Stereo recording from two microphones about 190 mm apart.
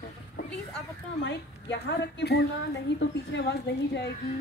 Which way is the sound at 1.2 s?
65° left (ahead or behind).